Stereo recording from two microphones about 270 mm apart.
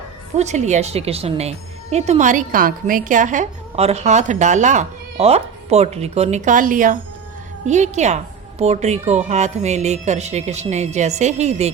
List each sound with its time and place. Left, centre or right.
0.3 s speech: right